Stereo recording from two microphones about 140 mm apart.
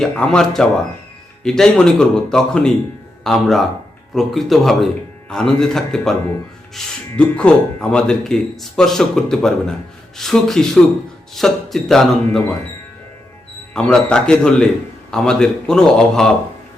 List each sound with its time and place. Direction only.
0.0 s speech: 5° left (ahead or behind)
13.7 s speech: 5° left (ahead or behind)